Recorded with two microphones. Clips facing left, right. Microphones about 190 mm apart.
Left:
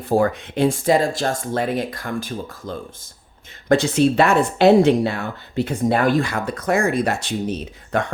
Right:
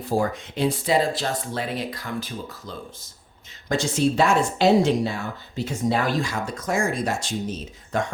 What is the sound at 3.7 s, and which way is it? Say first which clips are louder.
A woman's voice: left 6 dB; 60° left (ahead or behind).